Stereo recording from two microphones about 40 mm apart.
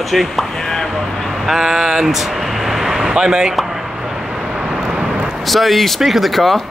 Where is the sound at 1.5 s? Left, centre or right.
Centre.